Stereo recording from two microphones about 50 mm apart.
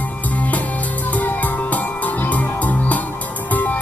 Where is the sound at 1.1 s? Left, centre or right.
Left.